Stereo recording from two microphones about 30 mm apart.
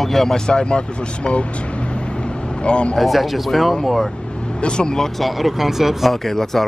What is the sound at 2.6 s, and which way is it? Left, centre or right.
Speech, left.